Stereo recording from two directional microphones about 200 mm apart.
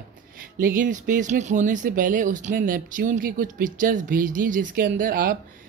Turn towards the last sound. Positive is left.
turn(degrees=-45)  # may be behind; listen again after turning